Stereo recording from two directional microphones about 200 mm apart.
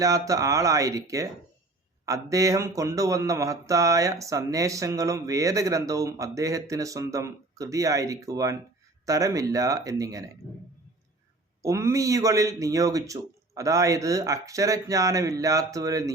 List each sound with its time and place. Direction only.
0.0 s speech: 15° right (ahead or behind)
11.6 s speech: 15° right (ahead or behind)